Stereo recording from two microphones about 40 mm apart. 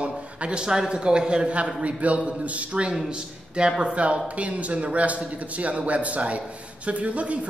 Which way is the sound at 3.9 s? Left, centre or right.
Right.